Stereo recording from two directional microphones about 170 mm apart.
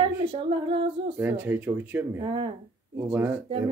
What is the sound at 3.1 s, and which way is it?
Speech, 10° right (ahead or behind).